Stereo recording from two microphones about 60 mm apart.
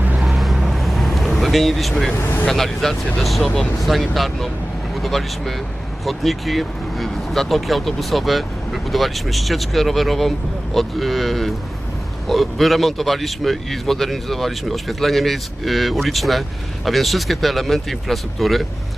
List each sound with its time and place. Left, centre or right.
0.2 s vehicle: centre
1.4 s speech: centre
2.1 s speech: left
2.5 s speech: centre